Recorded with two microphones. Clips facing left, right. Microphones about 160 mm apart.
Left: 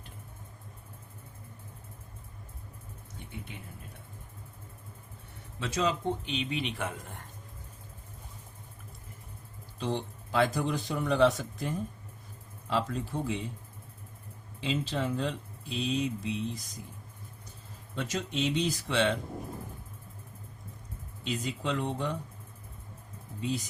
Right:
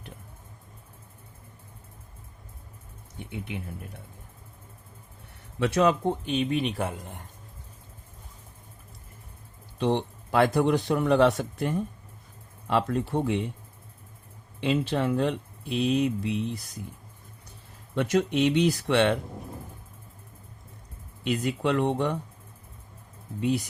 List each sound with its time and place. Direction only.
5.5 s speech: 65° right (ahead or behind); by 6.8 s 45° right (ahead or behind)
9.7 s a man's voice: 65° right (ahead or behind)
14.6 s a man's voice: 60° right (ahead or behind)
17.9 s a man's voice: 65° right (ahead or behind)
21.2 s a man's voice: 60° right (ahead or behind)